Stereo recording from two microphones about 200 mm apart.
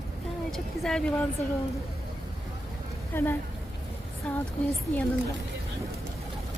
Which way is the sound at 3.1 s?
10° left (ahead or behind).